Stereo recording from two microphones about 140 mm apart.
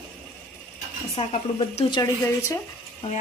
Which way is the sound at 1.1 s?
45° left (ahead or behind).